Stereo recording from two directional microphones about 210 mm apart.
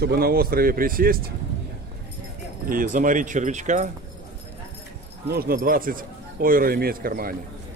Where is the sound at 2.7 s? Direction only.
40° right (ahead or behind).